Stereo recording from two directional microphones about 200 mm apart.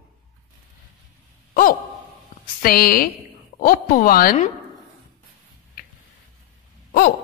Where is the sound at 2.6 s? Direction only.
50° left (ahead or behind).